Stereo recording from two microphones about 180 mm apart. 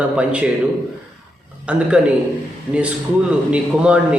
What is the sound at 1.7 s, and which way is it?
Speech, 5° right (ahead or behind).